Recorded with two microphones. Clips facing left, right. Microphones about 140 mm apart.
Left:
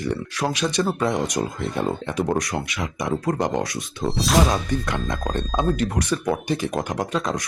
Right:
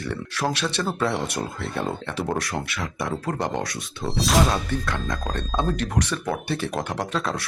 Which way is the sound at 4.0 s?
Centre (ahead or behind).